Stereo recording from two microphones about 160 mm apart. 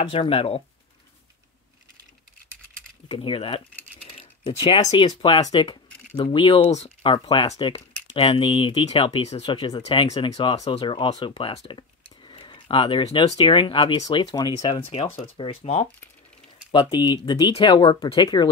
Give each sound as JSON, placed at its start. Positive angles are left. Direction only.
{"t": 0.1, "sound": "speech", "side_deg": 35}
{"t": 3.1, "sound": "speech", "side_deg": 35}
{"t": 6.7, "sound": "speech", "side_deg": 45}
{"t": 7.1, "sound": "speech", "side_deg": 30}
{"t": 14.9, "sound": "speech", "side_deg": 40}
{"t": 16.7, "sound": "speech", "side_deg": 25}